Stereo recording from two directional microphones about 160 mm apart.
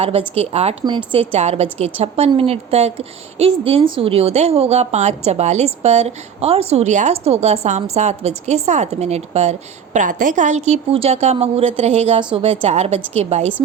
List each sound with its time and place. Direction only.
0.0 s a woman's voice: 40° right (ahead or behind)